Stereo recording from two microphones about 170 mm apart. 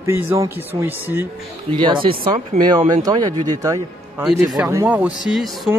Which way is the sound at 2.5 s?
40° right (ahead or behind).